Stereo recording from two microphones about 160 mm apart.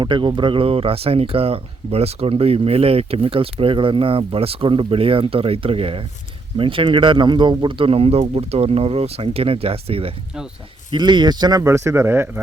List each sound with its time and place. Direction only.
0.0 s speech: 30° right (ahead or behind); by 12.4 s 15° right (ahead or behind)